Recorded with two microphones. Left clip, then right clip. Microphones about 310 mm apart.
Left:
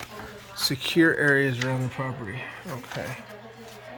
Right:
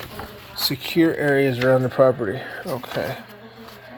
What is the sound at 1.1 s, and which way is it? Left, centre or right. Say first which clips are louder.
Speech: right 3 dB; centre.